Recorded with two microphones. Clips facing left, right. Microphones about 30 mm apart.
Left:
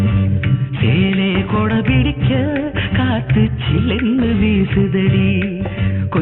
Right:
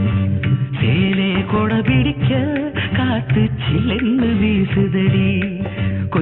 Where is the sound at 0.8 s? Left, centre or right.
Left.